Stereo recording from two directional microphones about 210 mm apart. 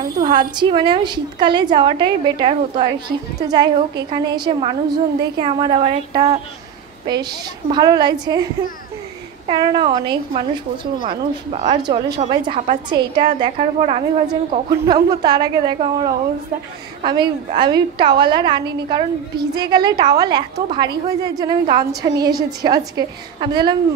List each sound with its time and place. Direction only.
0.2 s a woman's voice: 20° right (ahead or behind)
9.5 s a woman's voice: 20° right (ahead or behind)
14.2 s a woman's voice: 20° right (ahead or behind)